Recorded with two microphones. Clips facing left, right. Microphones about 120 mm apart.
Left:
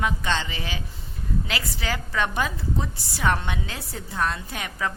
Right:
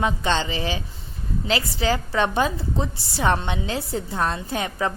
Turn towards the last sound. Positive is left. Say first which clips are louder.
# right 5 dB
turn(degrees=-30)  # may be behind; listen again after turning